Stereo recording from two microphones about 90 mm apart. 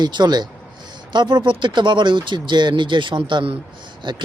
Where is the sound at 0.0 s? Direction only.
50° right (ahead or behind); by 3.6 s 70° right (ahead or behind).